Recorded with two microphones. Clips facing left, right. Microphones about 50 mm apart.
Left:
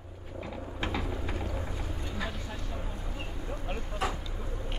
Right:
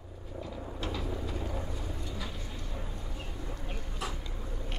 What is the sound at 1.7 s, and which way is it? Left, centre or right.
Vehicle, left.